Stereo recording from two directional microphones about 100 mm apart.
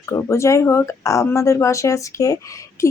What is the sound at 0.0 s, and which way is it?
A woman's voice, 30° left (ahead or behind).